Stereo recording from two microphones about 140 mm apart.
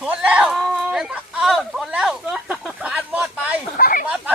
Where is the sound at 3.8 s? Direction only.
85° left.